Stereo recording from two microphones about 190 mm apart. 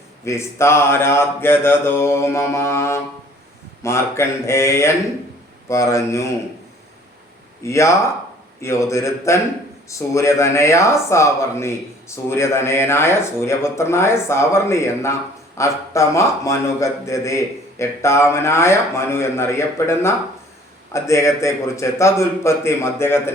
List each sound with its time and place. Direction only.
0.3 s speech: 15° left (ahead or behind)
7.6 s speech: 15° left (ahead or behind)